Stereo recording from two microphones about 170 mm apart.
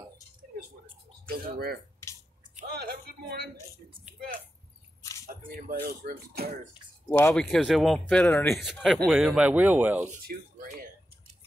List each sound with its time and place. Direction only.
1.3 s speech: 65° right (ahead or behind)
2.7 s a sound: 65° right (ahead or behind)
5.9 s speech: 65° right (ahead or behind)
7.1 s speech: 15° left (ahead or behind)
7.4 s speech: centre (ahead or behind)